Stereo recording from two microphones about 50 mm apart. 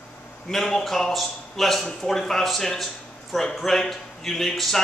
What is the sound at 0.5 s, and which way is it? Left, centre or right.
A man's voice, centre.